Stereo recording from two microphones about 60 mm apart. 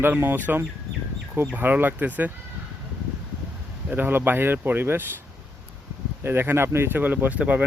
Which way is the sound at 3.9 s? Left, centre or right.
Right.